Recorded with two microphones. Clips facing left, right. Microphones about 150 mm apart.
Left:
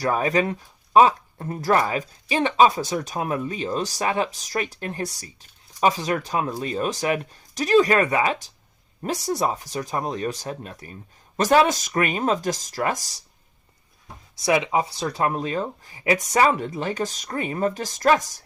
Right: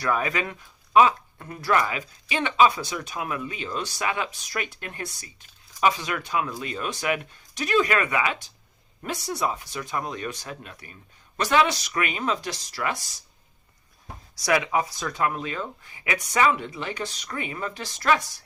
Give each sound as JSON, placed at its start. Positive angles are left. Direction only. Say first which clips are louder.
{"t": 0.0, "sound": "speech", "louder": "left 4 dB", "side_deg": 35}
{"t": 14.4, "sound": "speech", "louder": "left 2 dB", "side_deg": 25}